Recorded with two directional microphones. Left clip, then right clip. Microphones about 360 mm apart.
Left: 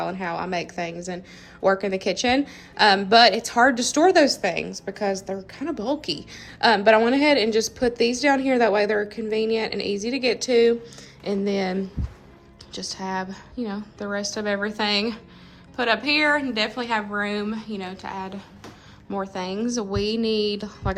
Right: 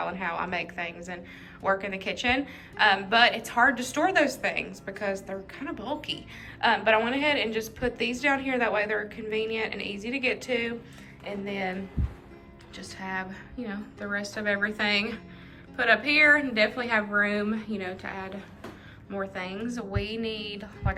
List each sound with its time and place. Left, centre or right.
0.0 s a woman's voice: centre